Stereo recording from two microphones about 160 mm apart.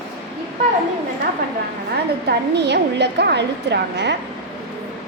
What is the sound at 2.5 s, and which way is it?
A woman's voice, 90° right.